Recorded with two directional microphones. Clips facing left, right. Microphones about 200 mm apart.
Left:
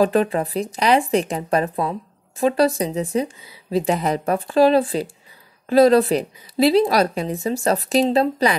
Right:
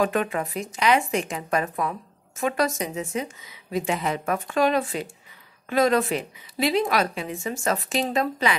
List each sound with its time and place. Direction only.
0.0 s a woman's voice: 35° left (ahead or behind)